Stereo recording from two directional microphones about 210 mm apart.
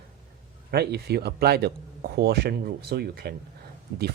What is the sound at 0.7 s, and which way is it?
Speech, 50° right (ahead or behind).